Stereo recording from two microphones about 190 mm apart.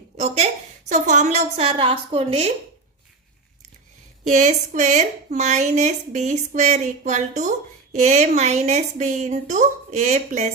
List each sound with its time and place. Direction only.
0.9 s a woman's voice: 40° right (ahead or behind)
4.2 s a woman's voice: 40° right (ahead or behind)